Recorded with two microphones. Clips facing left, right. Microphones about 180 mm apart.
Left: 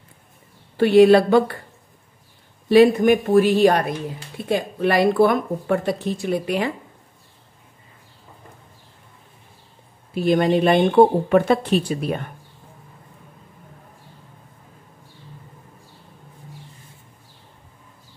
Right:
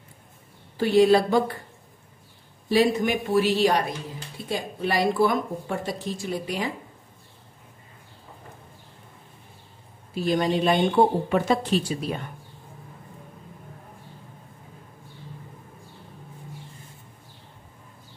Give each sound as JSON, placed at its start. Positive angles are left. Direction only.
{"t": 0.7, "sound": "speech", "side_deg": 65}
{"t": 2.7, "sound": "a woman's voice", "side_deg": 60}
{"t": 10.1, "sound": "speech", "side_deg": 60}